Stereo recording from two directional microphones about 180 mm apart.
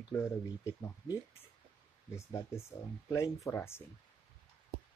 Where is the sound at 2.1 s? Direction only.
15° left (ahead or behind).